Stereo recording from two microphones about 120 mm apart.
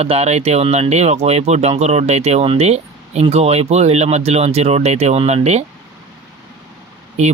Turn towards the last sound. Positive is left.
turn(degrees=-65)  # may be behind; listen again after turning